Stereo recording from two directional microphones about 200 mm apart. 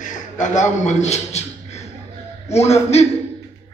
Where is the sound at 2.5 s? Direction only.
30° left (ahead or behind).